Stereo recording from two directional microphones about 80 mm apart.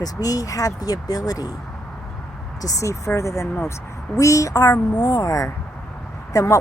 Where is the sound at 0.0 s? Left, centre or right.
Left.